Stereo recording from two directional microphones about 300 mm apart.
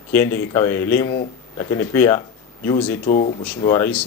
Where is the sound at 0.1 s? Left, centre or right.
Centre.